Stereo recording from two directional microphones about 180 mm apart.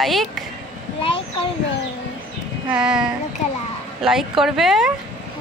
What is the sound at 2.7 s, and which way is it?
Speech, 5° right (ahead or behind).